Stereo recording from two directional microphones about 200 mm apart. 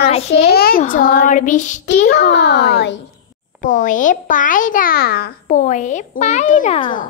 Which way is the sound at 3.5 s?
40° left (ahead or behind).